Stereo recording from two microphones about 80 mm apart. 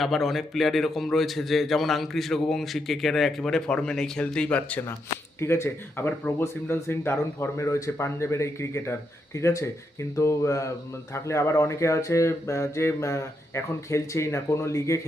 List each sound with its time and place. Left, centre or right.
0.0 s a man's voice: centre
5.4 s speech: left